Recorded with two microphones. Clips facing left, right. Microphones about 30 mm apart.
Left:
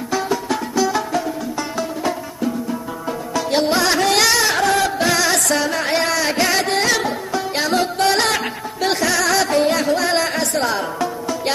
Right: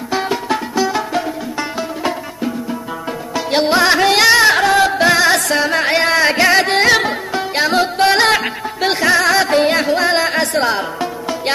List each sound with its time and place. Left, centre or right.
0.1 s music: right
0.7 s music: right
1.1 s music: right
9.8 s music: right
10.4 s music: right